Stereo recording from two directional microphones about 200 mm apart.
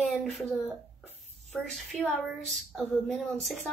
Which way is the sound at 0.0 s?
Centre (ahead or behind).